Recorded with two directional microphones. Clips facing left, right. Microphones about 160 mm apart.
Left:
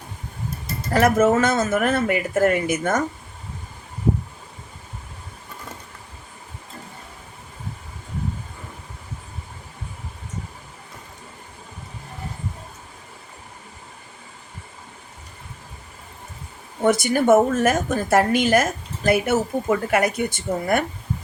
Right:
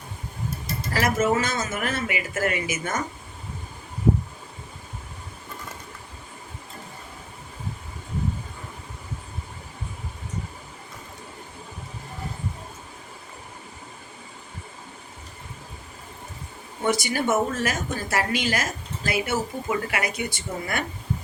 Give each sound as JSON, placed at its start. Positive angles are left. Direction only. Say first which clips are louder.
{"t": 0.9, "sound": "speech", "louder": "left 6 dB", "side_deg": 55}
{"t": 16.8, "sound": "a woman's voice", "louder": "left 6 dB", "side_deg": 55}